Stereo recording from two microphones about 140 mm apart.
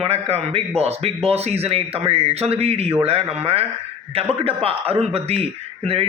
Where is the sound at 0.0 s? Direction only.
50° right (ahead or behind).